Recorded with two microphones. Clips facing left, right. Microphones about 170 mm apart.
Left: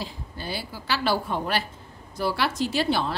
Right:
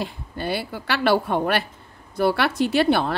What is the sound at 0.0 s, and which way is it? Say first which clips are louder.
Speech: right 6 dB; 60° right (ahead or behind).